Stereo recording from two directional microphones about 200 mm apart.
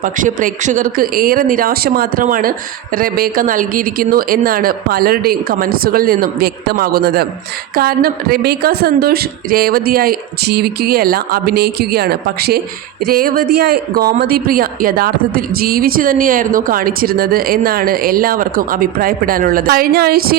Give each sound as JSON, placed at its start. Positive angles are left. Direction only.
{"t": 0.0, "sound": "speech", "side_deg": -40}